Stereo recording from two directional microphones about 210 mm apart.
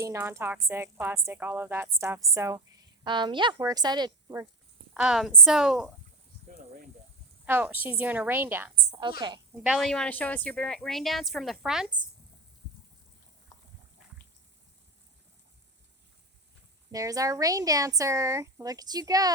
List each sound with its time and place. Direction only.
0.0 s a woman's voice: 10° right (ahead or behind)
4.9 s a woman's voice: 5° right (ahead or behind)
7.4 s a woman's voice: 10° right (ahead or behind)
9.0 s a woman's voice: 20° right (ahead or behind)
9.6 s a woman's voice: centre (ahead or behind)
13.5 s a sound: 15° left (ahead or behind)
16.9 s a woman's voice: 15° right (ahead or behind)